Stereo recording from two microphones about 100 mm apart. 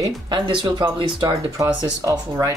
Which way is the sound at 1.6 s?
35° right (ahead or behind).